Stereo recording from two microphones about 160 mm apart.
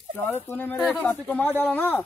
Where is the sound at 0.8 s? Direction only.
Centre (ahead or behind).